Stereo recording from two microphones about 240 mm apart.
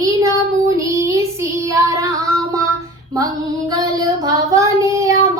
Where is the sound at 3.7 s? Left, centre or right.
Centre.